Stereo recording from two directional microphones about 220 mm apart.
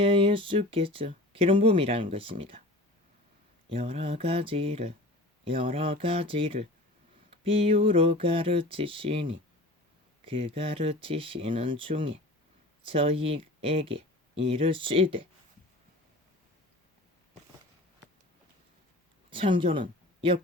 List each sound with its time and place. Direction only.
0.0 s speech: 25° right (ahead or behind)
3.7 s speech: 25° right (ahead or behind)
19.3 s speech: 25° right (ahead or behind)